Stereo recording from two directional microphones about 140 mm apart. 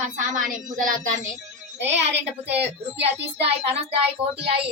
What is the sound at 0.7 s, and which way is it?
Speech, 75° right (ahead or behind).